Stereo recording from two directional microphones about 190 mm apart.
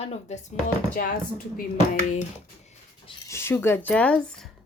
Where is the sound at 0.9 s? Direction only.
45° left (ahead or behind).